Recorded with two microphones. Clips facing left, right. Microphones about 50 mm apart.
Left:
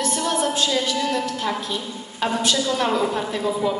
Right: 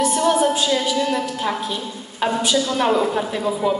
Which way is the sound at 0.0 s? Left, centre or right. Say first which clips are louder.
Right 5 dB; centre.